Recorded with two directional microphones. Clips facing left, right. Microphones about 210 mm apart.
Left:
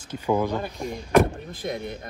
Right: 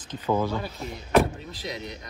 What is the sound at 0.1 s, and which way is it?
Speech, 15° left (ahead or behind).